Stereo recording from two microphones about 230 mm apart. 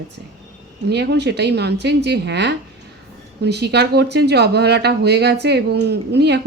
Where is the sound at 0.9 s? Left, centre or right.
Right.